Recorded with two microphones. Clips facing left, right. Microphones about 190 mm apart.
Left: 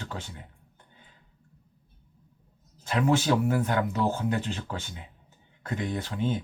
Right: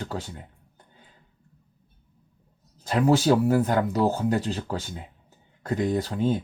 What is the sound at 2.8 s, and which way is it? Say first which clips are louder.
Speech: right 4 dB; 35° right (ahead or behind).